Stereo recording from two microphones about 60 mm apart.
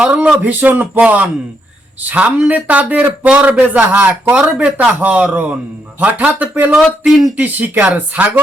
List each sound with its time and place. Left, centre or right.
0.0 s a man's voice: right
6.8 s a man's voice: centre
7.3 s a man's voice: right